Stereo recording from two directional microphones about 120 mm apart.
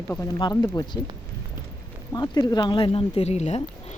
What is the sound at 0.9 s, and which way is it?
Speech, 25° left (ahead or behind).